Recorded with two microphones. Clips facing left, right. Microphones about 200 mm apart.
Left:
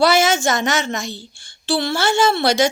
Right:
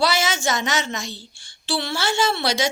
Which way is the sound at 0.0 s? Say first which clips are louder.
Left 6 dB; 50° left (ahead or behind).